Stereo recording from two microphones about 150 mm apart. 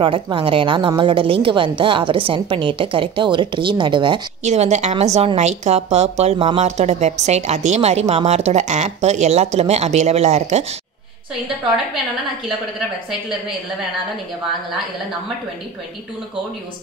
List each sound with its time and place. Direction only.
0.0 s a woman's voice: 35° right (ahead or behind)
4.4 s a woman's voice: 50° right (ahead or behind)